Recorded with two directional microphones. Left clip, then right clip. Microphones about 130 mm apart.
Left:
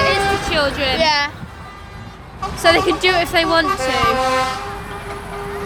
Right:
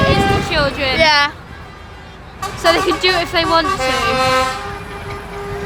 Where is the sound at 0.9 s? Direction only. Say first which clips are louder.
Right 6 dB; 35° right (ahead or behind).